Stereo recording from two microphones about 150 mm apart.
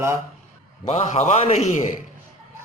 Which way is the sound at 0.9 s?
45° left (ahead or behind).